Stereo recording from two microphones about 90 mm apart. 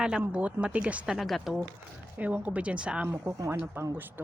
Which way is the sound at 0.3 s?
15° right (ahead or behind).